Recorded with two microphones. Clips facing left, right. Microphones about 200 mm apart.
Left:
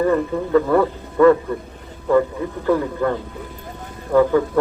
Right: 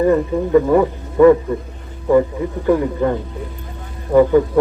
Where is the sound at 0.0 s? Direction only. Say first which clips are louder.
Right 3 dB; 15° right (ahead or behind).